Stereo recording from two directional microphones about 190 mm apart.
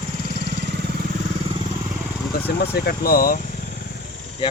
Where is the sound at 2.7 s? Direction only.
55° left (ahead or behind).